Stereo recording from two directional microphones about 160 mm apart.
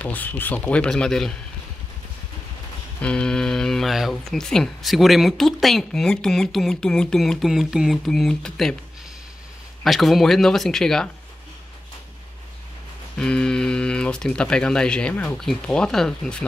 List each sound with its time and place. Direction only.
0.0 s speech: 10° left (ahead or behind)
3.0 s speech: 5° left (ahead or behind)
9.8 s speech: centre (ahead or behind)
13.2 s speech: 5° left (ahead or behind)